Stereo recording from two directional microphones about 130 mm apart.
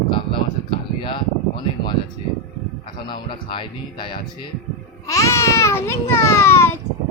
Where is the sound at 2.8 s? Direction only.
40° left (ahead or behind).